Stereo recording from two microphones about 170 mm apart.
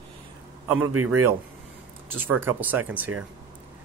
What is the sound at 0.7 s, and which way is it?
Speech, 15° right (ahead or behind).